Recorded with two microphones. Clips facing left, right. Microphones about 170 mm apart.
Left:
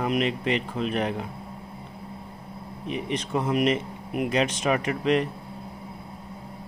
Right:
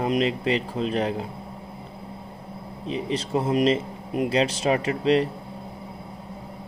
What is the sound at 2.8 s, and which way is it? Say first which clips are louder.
Speech: right 2 dB; 30° right (ahead or behind).